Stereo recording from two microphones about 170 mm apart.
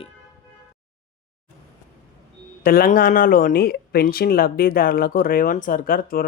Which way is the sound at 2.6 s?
60° left (ahead or behind).